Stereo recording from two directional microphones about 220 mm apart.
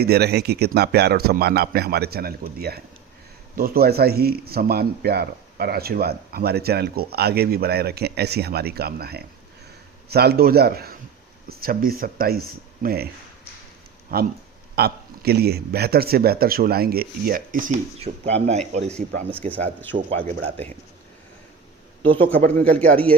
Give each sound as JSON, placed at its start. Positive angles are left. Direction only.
{"t": 0.0, "sound": "speech", "side_deg": -45}
{"t": 14.1, "sound": "speech", "side_deg": -40}
{"t": 19.4, "sound": "speech", "side_deg": 5}
{"t": 22.4, "sound": "a man's voice", "side_deg": -40}